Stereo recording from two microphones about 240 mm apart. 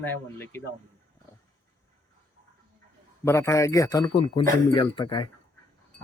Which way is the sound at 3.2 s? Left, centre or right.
Centre.